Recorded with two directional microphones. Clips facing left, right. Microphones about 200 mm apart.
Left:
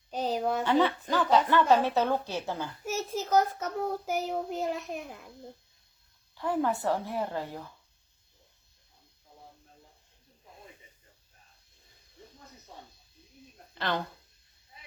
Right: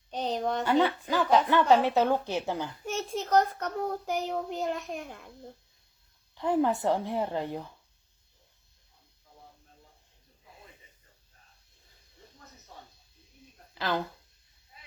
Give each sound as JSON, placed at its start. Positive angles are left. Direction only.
{"t": 0.1, "sound": "a sound", "side_deg": 5}
{"t": 0.9, "sound": "a woman's voice", "side_deg": -10}
{"t": 2.8, "sound": "a child's voice", "side_deg": 5}
{"t": 6.3, "sound": "a woman's voice", "side_deg": -20}
{"t": 13.7, "sound": "speech", "side_deg": 0}